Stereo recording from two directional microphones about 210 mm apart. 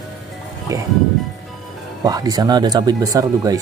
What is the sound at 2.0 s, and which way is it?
Speech, 20° right (ahead or behind).